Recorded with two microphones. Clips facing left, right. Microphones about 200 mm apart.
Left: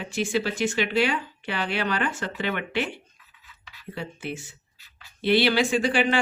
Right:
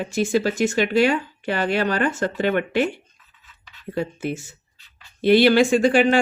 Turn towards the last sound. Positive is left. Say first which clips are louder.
# right 6 dB
turn(degrees=-45)  # may be behind; listen again after turning